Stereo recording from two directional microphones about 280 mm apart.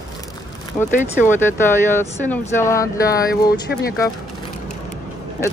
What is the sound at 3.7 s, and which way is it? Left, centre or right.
Speech, left.